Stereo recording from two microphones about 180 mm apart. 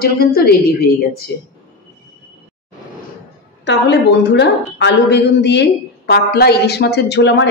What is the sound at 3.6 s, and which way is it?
Speech, 75° left (ahead or behind).